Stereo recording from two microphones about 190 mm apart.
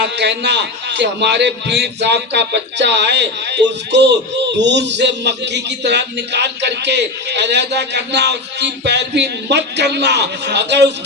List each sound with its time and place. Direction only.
0.0 s a man's voice: 65° right (ahead or behind)